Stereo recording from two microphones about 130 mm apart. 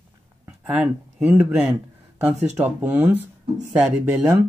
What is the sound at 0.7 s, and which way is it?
Speech, 10° right (ahead or behind).